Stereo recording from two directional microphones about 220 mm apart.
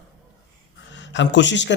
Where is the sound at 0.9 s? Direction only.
55° left (ahead or behind).